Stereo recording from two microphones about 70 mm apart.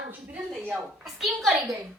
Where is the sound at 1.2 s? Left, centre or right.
Centre.